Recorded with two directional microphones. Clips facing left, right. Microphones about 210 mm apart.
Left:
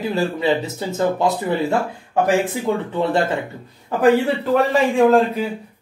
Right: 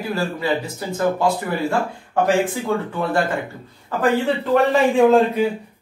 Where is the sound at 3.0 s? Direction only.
25° left (ahead or behind).